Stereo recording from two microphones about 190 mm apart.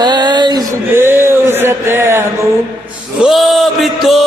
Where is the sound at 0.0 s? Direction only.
25° right (ahead or behind).